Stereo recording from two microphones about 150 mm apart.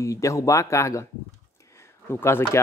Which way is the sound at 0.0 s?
20° left (ahead or behind).